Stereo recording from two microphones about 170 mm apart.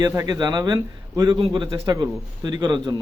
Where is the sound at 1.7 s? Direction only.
20° right (ahead or behind).